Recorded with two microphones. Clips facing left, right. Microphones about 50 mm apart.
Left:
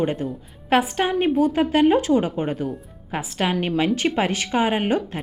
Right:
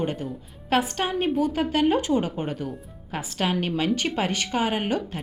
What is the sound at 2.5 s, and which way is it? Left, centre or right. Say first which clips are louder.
Speech: left 5 dB; centre.